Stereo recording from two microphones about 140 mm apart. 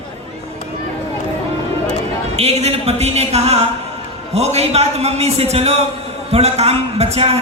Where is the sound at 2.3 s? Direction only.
50° right (ahead or behind).